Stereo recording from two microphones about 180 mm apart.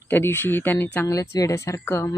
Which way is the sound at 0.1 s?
15° left (ahead or behind).